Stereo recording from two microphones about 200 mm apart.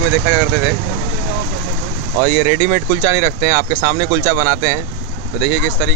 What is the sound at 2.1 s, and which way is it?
Speech, 15° right (ahead or behind).